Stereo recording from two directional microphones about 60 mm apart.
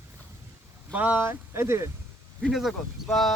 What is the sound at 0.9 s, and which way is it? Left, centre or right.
Speech, right.